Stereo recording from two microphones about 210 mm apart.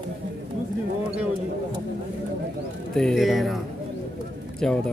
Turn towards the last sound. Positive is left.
turn(degrees=0)  # may be behind; listen again after turning